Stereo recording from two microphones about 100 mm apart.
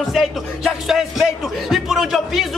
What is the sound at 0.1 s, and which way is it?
A man's voice, centre (ahead or behind).